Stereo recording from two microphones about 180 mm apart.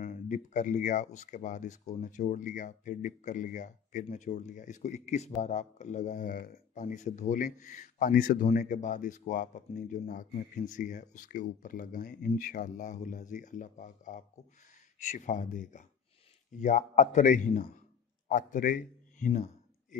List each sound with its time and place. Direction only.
0.0 s speech: 45° left (ahead or behind)